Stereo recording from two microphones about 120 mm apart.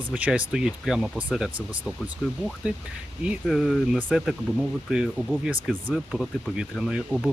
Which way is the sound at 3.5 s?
5° left (ahead or behind).